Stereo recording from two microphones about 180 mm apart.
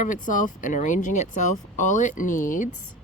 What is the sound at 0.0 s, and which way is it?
Speech, 45° left (ahead or behind).